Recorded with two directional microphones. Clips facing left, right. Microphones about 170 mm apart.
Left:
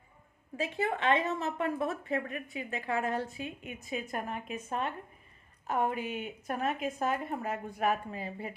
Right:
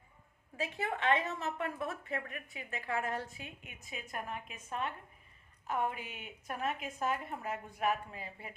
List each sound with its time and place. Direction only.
0.5 s a woman's voice: 25° left (ahead or behind)